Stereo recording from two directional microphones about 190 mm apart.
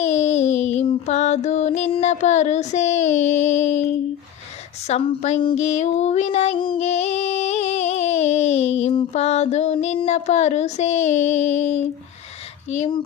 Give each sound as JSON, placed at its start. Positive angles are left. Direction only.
{"t": 0.0, "sound": "child singing", "side_deg": 35}
{"t": 4.9, "sound": "female singing", "side_deg": 35}